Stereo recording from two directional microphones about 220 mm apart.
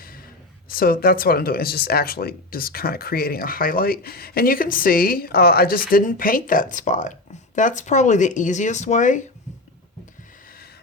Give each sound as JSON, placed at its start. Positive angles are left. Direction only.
{"t": 0.7, "sound": "speech", "side_deg": 40}